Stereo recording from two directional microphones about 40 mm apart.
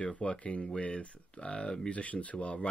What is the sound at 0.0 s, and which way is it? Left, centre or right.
Speech, left.